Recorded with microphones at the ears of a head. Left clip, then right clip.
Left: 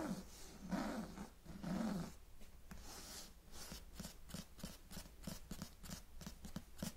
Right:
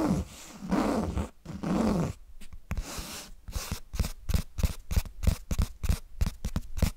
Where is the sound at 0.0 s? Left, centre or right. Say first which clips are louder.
Right 17 dB; right.